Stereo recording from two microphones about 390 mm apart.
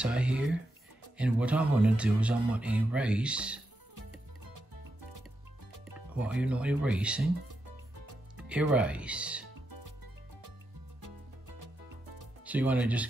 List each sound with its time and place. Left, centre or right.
0.0 s speech: centre
5.9 s speech: centre
8.4 s speech: centre
11.0 s music: right
12.4 s speech: centre